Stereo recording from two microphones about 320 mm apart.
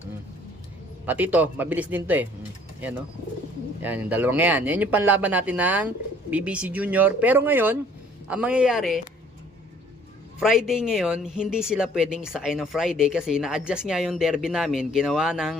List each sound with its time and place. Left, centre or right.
1.0 s speech: centre
3.8 s speech: centre
10.4 s speech: centre